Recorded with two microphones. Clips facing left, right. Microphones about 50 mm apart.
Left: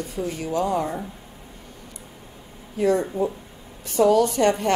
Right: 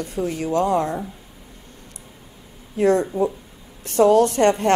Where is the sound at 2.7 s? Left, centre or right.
Right.